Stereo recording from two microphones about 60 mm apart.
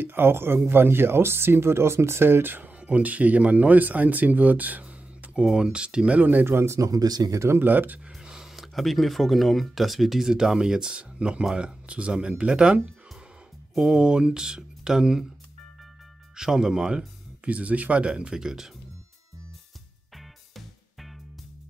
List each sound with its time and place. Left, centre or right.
0.0 s speech: right
2.8 s speech: right
6.1 s speech: right
6.5 s speech: right
6.8 s speech: right
7.4 s speech: right
8.1 s speech: centre
13.7 s speech: centre
16.3 s speech: centre
17.5 s speech: right
20.2 s music: centre